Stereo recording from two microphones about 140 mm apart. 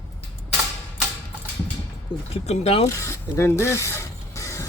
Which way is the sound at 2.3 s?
45° left (ahead or behind).